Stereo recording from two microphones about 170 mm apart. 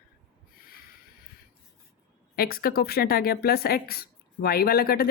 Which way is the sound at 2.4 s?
60° left (ahead or behind).